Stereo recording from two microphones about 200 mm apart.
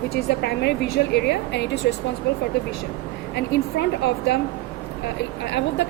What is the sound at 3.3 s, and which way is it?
A woman's voice, 60° left (ahead or behind).